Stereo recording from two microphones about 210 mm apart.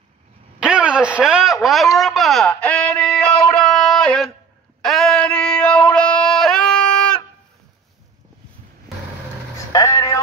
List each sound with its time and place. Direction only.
0.6 s speech: 5° right (ahead or behind)
2.0 s a sound: centre (ahead or behind)
9.7 s vehicle: 15° left (ahead or behind)